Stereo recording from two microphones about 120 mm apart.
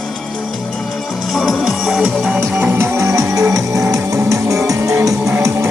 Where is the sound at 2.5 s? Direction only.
20° right (ahead or behind).